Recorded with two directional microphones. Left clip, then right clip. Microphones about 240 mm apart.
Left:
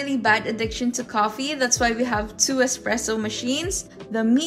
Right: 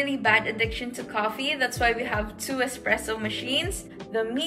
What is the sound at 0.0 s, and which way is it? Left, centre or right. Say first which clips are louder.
A woman's voice: left 2 dB; left.